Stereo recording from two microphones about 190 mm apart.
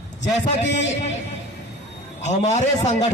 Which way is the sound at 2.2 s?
35° left (ahead or behind).